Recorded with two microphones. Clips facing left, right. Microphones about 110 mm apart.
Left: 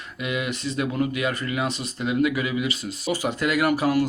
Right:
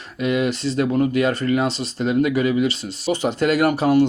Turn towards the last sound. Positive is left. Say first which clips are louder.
# right 5 dB
turn(degrees=-30)  # may be behind; listen again after turning